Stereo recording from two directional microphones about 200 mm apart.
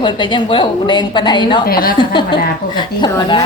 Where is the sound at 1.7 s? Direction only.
50° left (ahead or behind).